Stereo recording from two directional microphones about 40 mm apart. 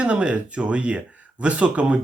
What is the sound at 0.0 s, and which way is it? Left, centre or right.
Speech, right.